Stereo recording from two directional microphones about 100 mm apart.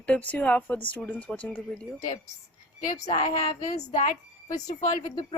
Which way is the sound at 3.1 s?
70° left (ahead or behind).